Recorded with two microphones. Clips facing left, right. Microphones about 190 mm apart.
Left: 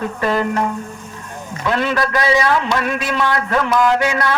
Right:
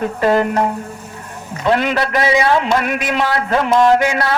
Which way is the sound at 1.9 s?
25° right (ahead or behind).